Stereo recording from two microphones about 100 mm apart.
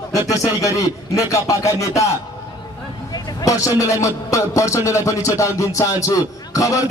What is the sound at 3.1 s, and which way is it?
Speech, 35° left (ahead or behind).